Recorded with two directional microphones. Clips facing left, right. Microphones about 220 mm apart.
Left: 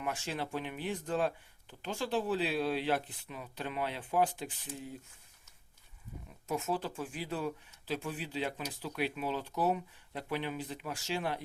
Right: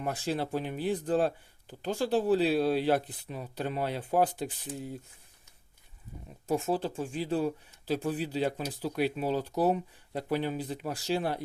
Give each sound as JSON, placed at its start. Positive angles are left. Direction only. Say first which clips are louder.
{"t": 0.0, "sound": "speech", "louder": "right 5 dB", "side_deg": -35}
{"t": 6.5, "sound": "speech", "louder": "right 6 dB", "side_deg": -30}